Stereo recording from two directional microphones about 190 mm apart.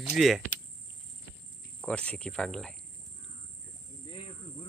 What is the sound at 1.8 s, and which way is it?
Speech, 5° left (ahead or behind).